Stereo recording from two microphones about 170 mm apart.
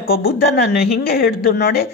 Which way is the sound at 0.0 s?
65° left (ahead or behind).